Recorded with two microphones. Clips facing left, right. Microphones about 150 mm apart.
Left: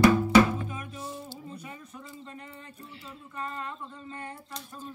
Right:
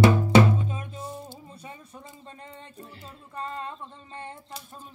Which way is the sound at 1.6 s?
30° right (ahead or behind).